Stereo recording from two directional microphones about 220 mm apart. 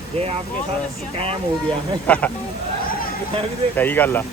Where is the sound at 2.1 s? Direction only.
5° left (ahead or behind).